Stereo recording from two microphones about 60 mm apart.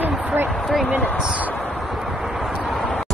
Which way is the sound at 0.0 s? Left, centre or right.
Right.